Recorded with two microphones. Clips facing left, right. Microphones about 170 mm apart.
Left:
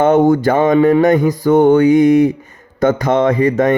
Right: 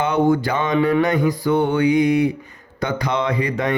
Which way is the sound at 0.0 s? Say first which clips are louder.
Left 7 dB; 45° left (ahead or behind).